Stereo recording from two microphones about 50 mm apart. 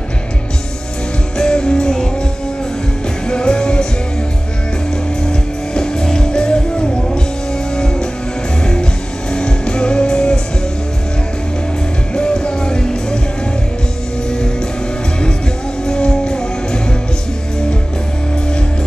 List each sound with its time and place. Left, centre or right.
1.4 s music: centre
3.3 s music: centre
5.2 s music: centre
9.3 s music: centre
12.1 s music: centre
15.8 s music: centre